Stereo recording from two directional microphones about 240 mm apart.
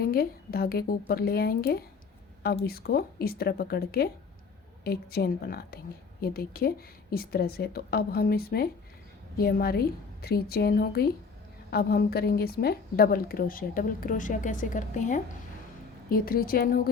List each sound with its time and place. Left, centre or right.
0.0 s a woman's voice: left